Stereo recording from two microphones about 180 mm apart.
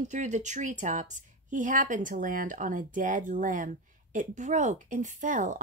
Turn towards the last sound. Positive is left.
turn(degrees=-45)  # may be behind; listen again after turning